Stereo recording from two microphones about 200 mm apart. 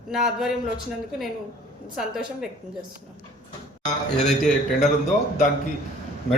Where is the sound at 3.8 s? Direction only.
35° left (ahead or behind).